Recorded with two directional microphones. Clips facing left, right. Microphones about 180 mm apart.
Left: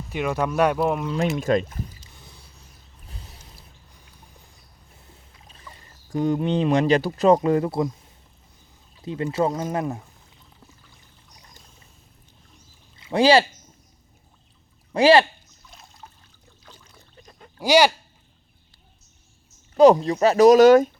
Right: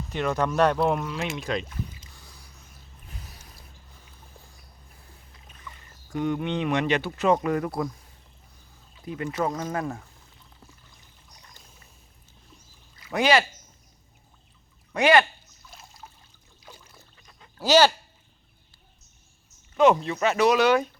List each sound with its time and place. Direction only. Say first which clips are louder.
0.1 s speech: left 1 dB; 10° left (ahead or behind)
1.4 s speech: left 8 dB; 45° left (ahead or behind)
2.1 s a sound: left 2 dB; 25° left (ahead or behind)
5.5 s speech: even; 30° left (ahead or behind)
9.0 s speech: left 5 dB; 30° left (ahead or behind)
13.0 s speech: left 5 dB; 30° left (ahead or behind)
14.9 s speech: left 4 dB; 30° left (ahead or behind)
15.7 s trickle: even; 5° right (ahead or behind)
16.6 s boat: right 2 dB; 10° right (ahead or behind)
17.2 s a sound: left 7 dB; 45° left (ahead or behind)
17.6 s speech: left 2 dB; 15° left (ahead or behind)
19.7 s speech: left 6 dB; 35° left (ahead or behind)